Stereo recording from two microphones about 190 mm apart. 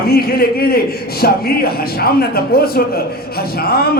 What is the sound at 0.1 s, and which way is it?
Speech, 55° left (ahead or behind).